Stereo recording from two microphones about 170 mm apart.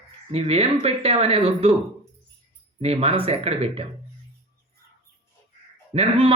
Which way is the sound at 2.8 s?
35° right (ahead or behind).